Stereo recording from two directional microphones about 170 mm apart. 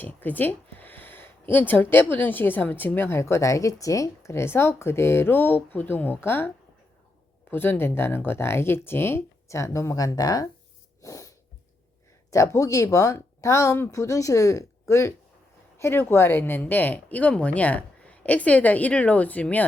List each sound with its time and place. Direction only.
0.0 s speech: 10° left (ahead or behind)
7.5 s speech: 10° left (ahead or behind)
11.0 s sneeze: 20° left (ahead or behind)
12.3 s speech: 20° left (ahead or behind)